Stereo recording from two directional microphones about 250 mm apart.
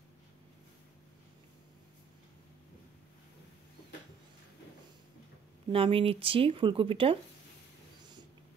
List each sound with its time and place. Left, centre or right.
5.7 s speech: right